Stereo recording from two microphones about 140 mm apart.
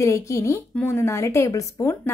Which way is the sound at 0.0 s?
20° left (ahead or behind).